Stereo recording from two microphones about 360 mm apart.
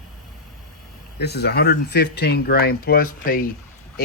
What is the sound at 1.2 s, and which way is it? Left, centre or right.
Speech, left.